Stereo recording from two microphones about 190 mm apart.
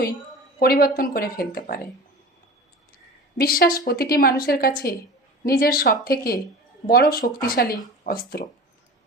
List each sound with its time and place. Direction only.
0.6 s speech: 50° left (ahead or behind)
3.3 s speech: 50° left (ahead or behind)